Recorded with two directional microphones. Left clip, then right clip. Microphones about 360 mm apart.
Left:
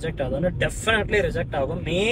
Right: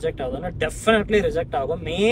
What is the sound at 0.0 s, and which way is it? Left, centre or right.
A man's voice, centre.